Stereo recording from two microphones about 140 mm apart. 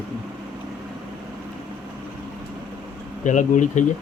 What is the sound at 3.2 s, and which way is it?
Speech, 65° left (ahead or behind).